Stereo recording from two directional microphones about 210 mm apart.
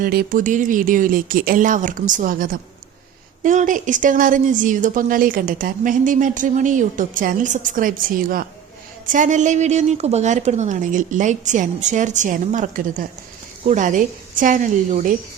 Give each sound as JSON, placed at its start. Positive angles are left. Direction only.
{"t": 0.0, "sound": "speech", "side_deg": -45}